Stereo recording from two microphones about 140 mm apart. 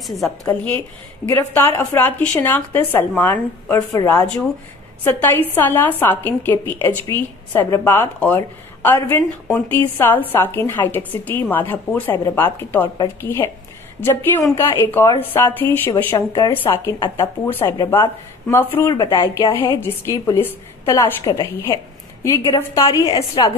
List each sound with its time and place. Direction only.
0.5 s a woman's voice: 10° left (ahead or behind)
18.9 s a woman's voice: 25° left (ahead or behind)
21.2 s a woman's voice: 30° left (ahead or behind)